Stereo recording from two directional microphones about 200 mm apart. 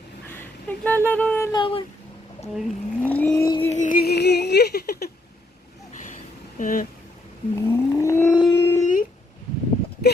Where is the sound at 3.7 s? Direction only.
40° left (ahead or behind).